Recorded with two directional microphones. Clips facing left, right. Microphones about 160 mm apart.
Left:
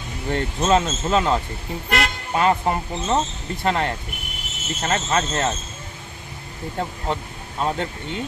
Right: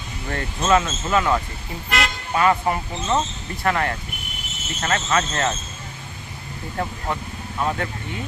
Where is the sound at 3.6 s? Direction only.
25° left (ahead or behind).